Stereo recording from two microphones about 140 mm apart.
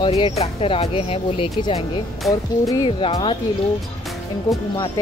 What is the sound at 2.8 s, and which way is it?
Speech, 40° left (ahead or behind).